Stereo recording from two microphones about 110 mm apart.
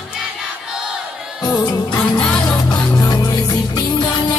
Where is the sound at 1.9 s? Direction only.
10° left (ahead or behind).